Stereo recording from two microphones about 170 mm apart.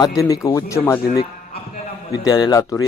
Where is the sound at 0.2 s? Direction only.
20° left (ahead or behind).